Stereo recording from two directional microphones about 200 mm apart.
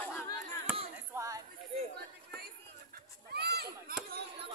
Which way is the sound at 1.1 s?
15° right (ahead or behind).